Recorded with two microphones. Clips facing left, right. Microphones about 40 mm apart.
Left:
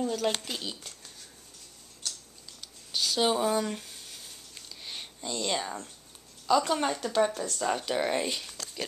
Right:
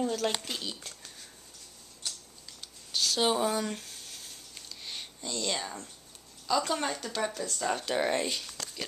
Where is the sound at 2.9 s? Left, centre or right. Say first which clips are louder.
Left 1 dB; centre.